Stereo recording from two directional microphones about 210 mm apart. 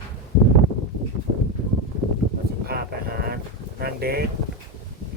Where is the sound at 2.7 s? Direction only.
45° right (ahead or behind).